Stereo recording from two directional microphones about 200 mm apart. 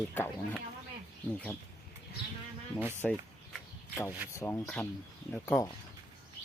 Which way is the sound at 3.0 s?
5° left (ahead or behind).